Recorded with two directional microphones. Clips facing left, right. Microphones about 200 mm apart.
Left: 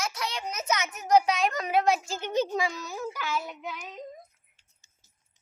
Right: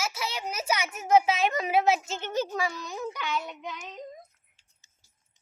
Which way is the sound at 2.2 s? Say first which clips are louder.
Left 4 dB; 15° left (ahead or behind).